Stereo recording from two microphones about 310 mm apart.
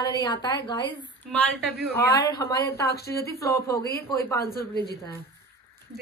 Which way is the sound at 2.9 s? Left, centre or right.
Left.